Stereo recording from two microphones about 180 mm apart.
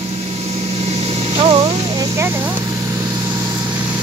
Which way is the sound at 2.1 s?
15° right (ahead or behind).